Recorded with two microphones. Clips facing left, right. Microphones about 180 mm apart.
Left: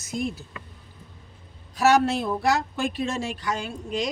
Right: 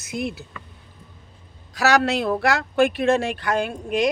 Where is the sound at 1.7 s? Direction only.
80° right.